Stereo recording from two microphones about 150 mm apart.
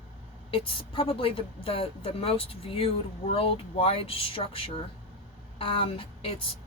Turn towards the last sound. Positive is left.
turn(degrees=35)  # may be behind; listen again after turning